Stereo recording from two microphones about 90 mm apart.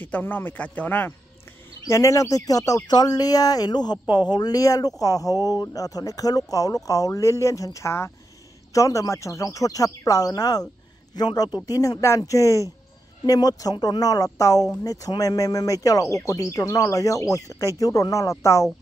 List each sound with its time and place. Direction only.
0.0 s speech: 20° left (ahead or behind)
1.9 s speech: 35° left (ahead or behind)